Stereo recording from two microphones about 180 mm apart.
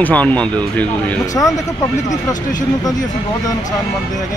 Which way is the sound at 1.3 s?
20° left (ahead or behind).